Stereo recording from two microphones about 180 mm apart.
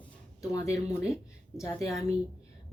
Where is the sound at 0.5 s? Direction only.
15° left (ahead or behind).